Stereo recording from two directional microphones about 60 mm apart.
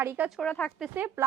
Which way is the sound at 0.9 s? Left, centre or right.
Right.